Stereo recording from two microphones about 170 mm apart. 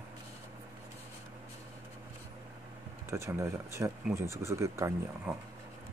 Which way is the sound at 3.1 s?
15° right (ahead or behind).